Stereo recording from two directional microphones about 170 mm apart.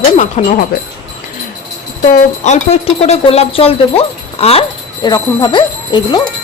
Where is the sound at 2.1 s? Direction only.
45° left (ahead or behind).